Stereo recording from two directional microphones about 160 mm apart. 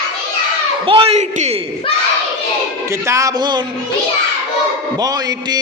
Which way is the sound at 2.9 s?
20° right (ahead or behind).